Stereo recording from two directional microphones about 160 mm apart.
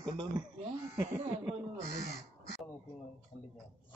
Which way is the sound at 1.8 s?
90° left.